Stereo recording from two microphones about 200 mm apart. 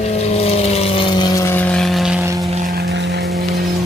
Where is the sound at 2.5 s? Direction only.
45° right (ahead or behind); by 3.2 s 60° right (ahead or behind).